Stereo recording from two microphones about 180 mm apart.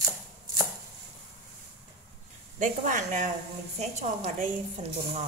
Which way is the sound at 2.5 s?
45° right (ahead or behind).